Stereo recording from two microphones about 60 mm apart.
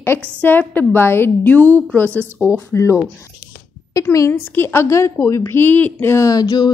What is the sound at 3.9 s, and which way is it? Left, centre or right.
Speech, left.